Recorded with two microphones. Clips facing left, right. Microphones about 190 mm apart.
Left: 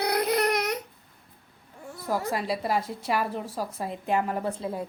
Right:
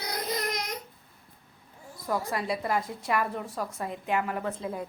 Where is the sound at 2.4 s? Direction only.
30° left (ahead or behind).